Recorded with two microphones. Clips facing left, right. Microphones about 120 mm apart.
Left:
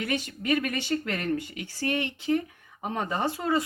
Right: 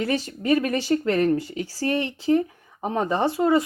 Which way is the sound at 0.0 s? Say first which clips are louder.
Right 5 dB; 35° right (ahead or behind).